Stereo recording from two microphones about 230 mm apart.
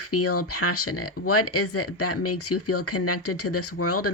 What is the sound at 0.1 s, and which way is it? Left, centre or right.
Speech, left.